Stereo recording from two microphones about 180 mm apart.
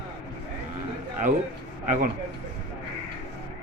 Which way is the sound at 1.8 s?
45° right (ahead or behind).